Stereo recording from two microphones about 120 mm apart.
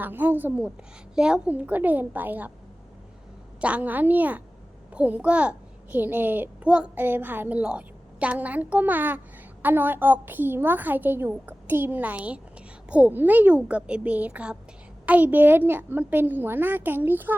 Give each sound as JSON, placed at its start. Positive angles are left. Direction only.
{"t": 0.0, "sound": "a child's voice", "side_deg": -15}
{"t": 3.6, "sound": "a child's voice", "side_deg": -10}